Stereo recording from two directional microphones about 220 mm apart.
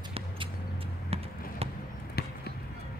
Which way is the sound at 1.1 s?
25° right (ahead or behind).